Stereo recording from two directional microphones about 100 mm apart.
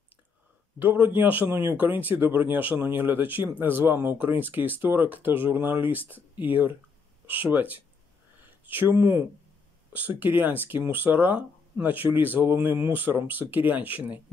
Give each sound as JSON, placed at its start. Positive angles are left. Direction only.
{"t": 0.7, "sound": "speech", "side_deg": -15}